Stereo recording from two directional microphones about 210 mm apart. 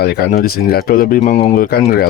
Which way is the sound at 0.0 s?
50° left (ahead or behind).